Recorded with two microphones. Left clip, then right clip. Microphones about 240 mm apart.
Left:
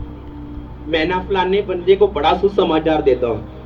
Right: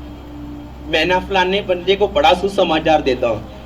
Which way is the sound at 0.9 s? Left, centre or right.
Right.